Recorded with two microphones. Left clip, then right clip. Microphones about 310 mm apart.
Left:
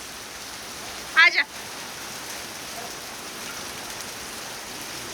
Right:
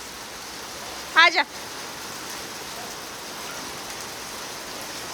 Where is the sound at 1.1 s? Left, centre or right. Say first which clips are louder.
Even; centre.